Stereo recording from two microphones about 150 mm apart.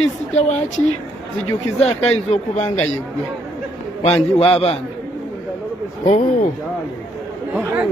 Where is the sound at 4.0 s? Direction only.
45° left (ahead or behind).